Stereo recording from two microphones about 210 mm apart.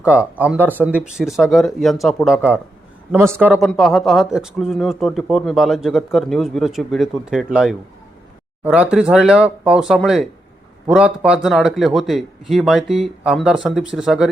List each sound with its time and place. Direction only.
0.0 s speech: 5° right (ahead or behind)